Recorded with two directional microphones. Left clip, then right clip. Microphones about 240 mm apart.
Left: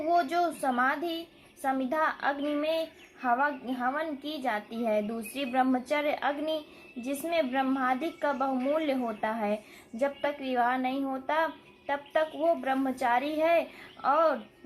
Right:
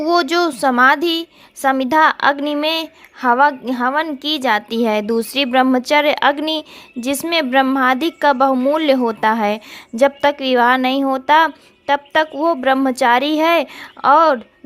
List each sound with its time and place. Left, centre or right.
0.1 s speech: right